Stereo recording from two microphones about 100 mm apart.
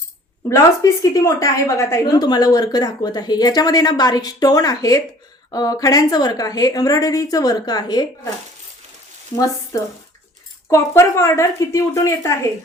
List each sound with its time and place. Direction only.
0.4 s speech: 30° left (ahead or behind)
2.1 s speech: 40° left (ahead or behind)
10.7 s speech: 30° left (ahead or behind)